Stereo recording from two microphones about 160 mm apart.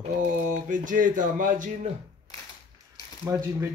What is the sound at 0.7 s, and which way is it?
Speech, 55° right (ahead or behind).